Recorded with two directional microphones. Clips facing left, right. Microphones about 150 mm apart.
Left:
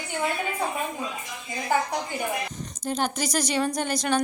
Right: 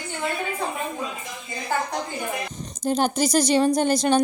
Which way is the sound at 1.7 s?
15° left (ahead or behind).